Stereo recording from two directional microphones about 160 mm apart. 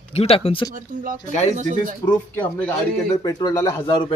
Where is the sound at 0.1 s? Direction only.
40° left (ahead or behind).